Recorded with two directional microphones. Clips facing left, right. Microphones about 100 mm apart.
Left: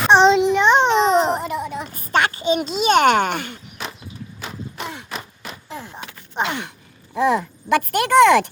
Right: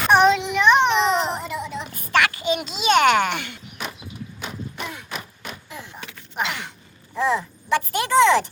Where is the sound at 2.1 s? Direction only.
30° left (ahead or behind).